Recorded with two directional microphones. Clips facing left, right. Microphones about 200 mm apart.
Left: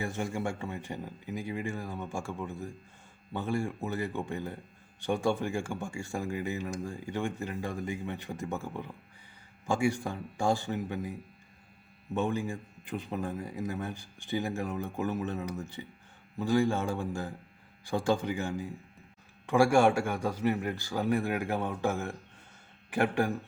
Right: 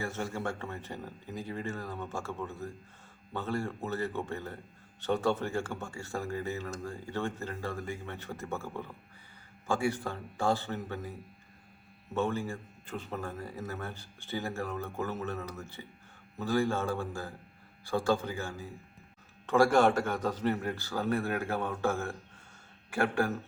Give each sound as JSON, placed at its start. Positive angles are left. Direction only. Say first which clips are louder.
{"t": 0.0, "sound": "speech", "louder": "left 2 dB", "side_deg": 15}
{"t": 12.1, "sound": "speech", "louder": "left 1 dB", "side_deg": 15}